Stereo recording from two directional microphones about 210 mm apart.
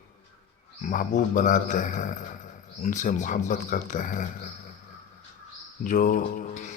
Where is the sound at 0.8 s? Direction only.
40° left (ahead or behind).